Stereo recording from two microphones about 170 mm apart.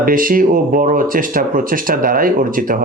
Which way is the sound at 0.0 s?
55° right (ahead or behind).